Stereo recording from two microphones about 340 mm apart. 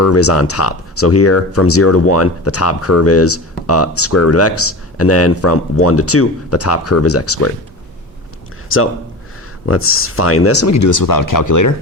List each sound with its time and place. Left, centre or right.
0.0 s speech: left
8.7 s a man's voice: left